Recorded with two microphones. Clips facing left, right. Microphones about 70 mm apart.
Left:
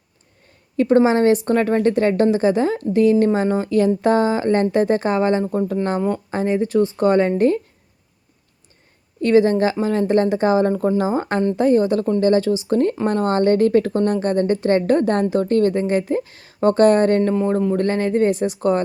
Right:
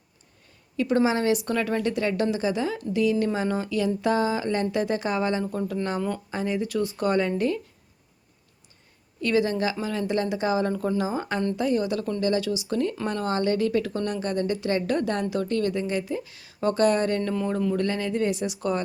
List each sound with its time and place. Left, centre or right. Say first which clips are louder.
0.8 s a woman's voice: left 8 dB; left
9.2 s a woman's voice: left 9 dB; left